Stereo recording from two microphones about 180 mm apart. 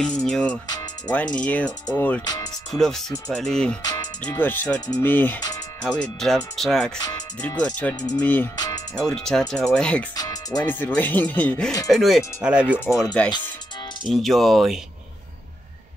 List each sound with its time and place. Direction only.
0.0 s speech: 5° left (ahead or behind)
0.7 s music: 20° left (ahead or behind)
1.1 s speech: 5° left (ahead or behind)
2.2 s music: 20° left (ahead or behind)
2.7 s speech: centre (ahead or behind)
3.8 s music: 20° left (ahead or behind)
4.2 s speech: 10° left (ahead or behind)
7.0 s speech: 20° left (ahead or behind)
7.4 s speech: 5° left (ahead or behind)
8.5 s speech: 20° left (ahead or behind)
9.1 s speech: 5° left (ahead or behind)
10.1 s speech: 20° left (ahead or behind); by 12.7 s 5° right (ahead or behind)
13.2 s speech: 5° left (ahead or behind)